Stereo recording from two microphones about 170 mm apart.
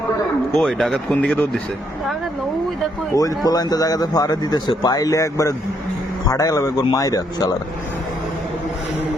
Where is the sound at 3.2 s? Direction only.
20° left (ahead or behind).